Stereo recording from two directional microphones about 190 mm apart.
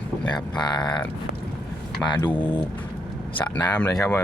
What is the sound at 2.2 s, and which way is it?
Speech, 25° left (ahead or behind).